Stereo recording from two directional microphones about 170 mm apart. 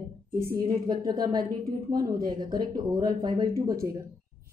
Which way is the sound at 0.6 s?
20° right (ahead or behind).